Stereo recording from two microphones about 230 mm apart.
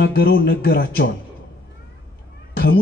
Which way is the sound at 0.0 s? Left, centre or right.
Left.